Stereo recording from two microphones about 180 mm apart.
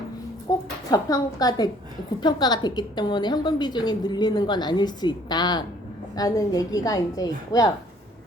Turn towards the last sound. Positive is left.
turn(degrees=20)  # may be behind; listen again after turning